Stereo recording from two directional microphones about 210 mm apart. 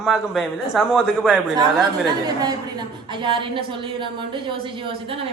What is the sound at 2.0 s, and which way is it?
A woman's voice, 20° right (ahead or behind).